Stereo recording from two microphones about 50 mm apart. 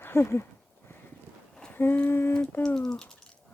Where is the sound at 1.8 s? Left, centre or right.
Left.